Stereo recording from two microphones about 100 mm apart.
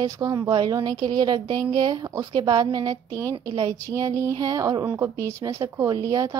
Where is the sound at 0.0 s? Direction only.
35° right (ahead or behind).